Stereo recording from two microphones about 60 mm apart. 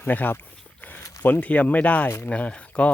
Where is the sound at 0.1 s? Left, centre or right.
Left.